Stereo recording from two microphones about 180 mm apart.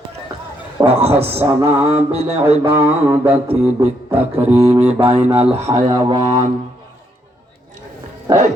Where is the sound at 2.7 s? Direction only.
10° right (ahead or behind).